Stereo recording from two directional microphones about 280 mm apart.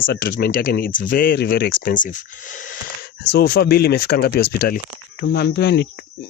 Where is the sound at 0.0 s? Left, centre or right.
Left.